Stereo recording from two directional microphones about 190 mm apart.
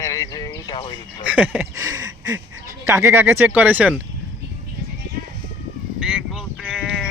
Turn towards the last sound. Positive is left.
turn(degrees=0)  # may be behind; listen again after turning